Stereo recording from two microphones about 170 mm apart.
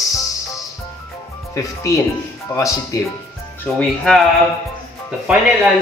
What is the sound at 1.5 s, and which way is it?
Speech, 20° left (ahead or behind).